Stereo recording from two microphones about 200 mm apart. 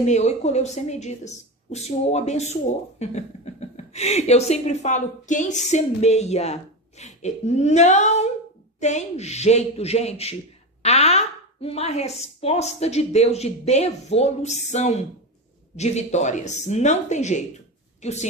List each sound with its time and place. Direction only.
0.0 s speech: 35° left (ahead or behind)